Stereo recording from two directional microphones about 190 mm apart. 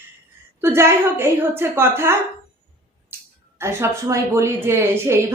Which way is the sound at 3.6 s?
15° right (ahead or behind).